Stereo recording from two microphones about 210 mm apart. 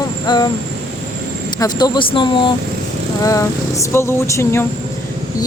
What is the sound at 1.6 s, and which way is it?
Speech, 20° left (ahead or behind).